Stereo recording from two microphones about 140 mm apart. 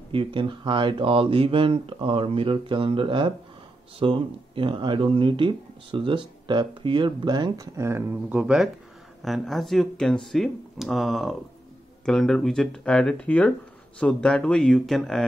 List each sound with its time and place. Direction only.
0.1 s speech: 40° right (ahead or behind); by 8.4 s 20° right (ahead or behind)
8.4 s speech: 5° right (ahead or behind)